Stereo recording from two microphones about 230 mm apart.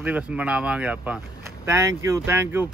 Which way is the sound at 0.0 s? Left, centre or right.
Centre.